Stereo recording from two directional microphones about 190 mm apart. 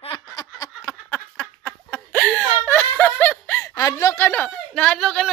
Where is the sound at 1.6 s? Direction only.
10° left (ahead or behind).